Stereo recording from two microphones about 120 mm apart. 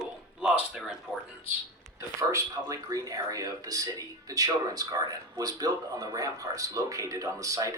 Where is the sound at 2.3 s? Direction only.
25° right (ahead or behind).